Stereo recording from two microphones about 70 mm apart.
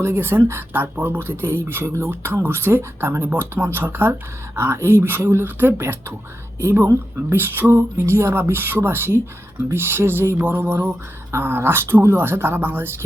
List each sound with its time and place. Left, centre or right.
0.0 s speech: right